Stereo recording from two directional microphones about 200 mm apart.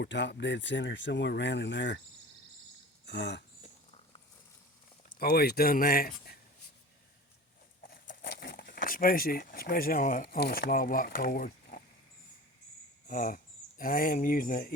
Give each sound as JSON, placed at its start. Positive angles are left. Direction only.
{"t": 0.0, "sound": "speech", "side_deg": 60}
{"t": 3.1, "sound": "speech", "side_deg": 60}
{"t": 5.0, "sound": "speech", "side_deg": 50}
{"t": 7.8, "sound": "speech", "side_deg": 45}
{"t": 13.1, "sound": "speech", "side_deg": 45}